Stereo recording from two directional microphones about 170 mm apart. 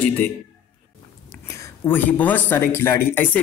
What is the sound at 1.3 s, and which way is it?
Speech, 15° left (ahead or behind).